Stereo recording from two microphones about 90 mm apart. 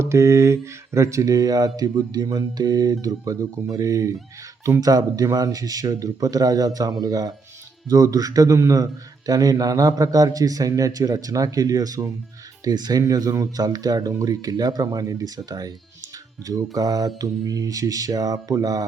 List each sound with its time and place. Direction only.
0.0 s a man's voice: 30° right (ahead or behind)